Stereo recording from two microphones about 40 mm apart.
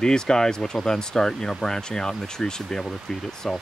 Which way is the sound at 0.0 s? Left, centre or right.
Centre.